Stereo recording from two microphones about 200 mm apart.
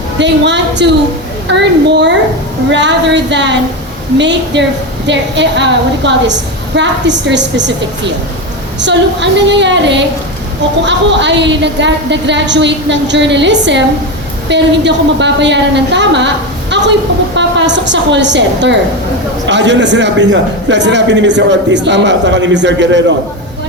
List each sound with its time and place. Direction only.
0.2 s a man's voice: 60° right (ahead or behind)